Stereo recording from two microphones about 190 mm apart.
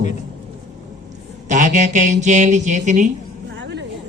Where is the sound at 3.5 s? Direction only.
70° right (ahead or behind).